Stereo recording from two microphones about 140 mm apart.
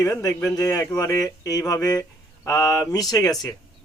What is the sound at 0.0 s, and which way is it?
Speech, 25° left (ahead or behind).